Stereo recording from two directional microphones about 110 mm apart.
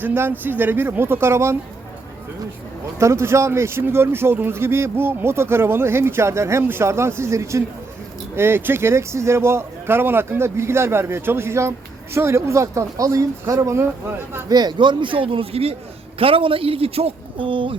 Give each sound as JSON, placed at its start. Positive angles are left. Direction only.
{"t": 0.0, "sound": "speech", "side_deg": -20}
{"t": 3.0, "sound": "speech", "side_deg": -25}
{"t": 14.5, "sound": "a man's voice", "side_deg": -40}